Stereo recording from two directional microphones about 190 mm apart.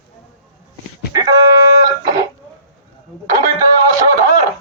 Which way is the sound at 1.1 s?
20° right (ahead or behind).